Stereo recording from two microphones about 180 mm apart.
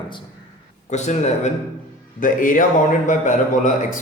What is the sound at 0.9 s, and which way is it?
A man's voice, 40° left (ahead or behind).